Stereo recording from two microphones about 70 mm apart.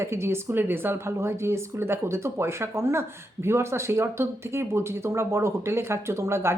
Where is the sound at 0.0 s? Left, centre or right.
Right.